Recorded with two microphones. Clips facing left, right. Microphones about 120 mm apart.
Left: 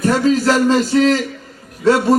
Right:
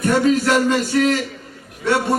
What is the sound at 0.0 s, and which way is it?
A man's voice, 30° left (ahead or behind).